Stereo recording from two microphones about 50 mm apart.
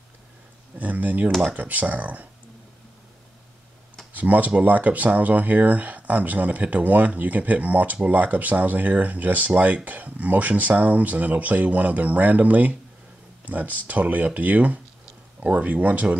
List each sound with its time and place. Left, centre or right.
0.7 s speech: right
4.1 s speech: right